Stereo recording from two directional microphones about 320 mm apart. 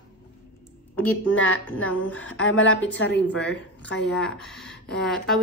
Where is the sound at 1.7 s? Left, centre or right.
Centre.